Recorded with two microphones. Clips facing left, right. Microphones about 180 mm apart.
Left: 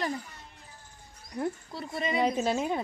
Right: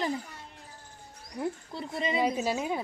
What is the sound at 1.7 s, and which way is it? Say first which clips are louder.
Speech: right 2 dB; 25° right (ahead or behind).